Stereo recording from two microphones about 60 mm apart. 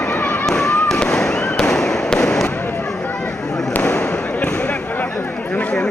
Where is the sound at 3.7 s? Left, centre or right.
Left.